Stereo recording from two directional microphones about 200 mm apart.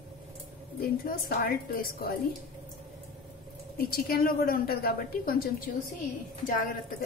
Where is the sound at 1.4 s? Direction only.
50° left (ahead or behind).